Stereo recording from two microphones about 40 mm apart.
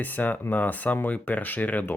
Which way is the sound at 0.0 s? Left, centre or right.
Left.